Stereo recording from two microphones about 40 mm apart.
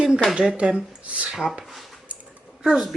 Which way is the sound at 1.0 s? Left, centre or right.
Right.